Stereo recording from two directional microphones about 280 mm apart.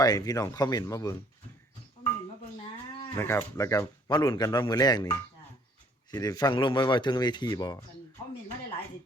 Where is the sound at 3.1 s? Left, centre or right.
Centre.